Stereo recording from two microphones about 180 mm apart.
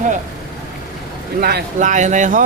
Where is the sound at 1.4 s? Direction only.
55° right (ahead or behind).